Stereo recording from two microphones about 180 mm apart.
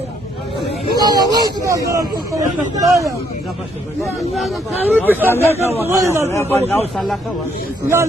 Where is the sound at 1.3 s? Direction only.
20° right (ahead or behind).